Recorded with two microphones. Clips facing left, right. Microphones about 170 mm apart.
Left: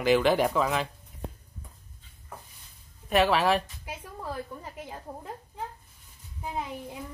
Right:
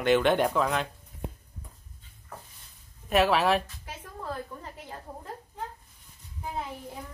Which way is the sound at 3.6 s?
10° left (ahead or behind).